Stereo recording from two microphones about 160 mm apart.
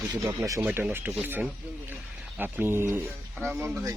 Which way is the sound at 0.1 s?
20° right (ahead or behind).